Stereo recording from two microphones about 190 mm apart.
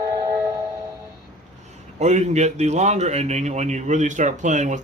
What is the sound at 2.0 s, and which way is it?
Speech, 35° right (ahead or behind).